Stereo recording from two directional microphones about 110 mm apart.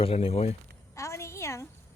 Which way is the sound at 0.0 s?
60° left (ahead or behind).